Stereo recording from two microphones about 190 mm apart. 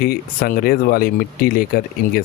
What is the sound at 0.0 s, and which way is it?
Speech, 50° left (ahead or behind).